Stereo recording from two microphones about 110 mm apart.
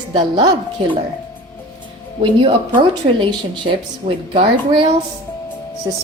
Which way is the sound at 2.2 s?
45° right (ahead or behind).